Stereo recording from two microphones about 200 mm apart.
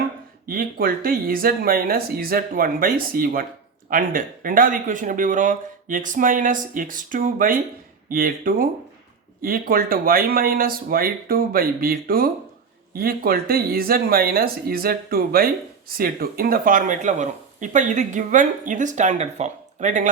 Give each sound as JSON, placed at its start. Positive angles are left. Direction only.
{"t": 0.4, "sound": "speech", "side_deg": -45}